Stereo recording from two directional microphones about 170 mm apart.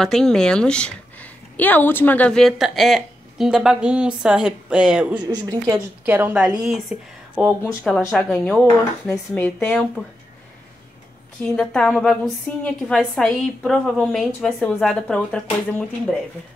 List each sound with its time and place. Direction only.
0.0 s a woman's voice: 5° left (ahead or behind)
5.2 s a woman's voice: 25° right (ahead or behind); by 7.5 s 5° right (ahead or behind)
7.6 s speech: 10° left (ahead or behind)
11.4 s a woman's voice: 5° left (ahead or behind)